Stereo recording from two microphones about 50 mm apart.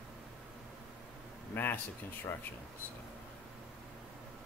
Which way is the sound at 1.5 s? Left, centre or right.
Left.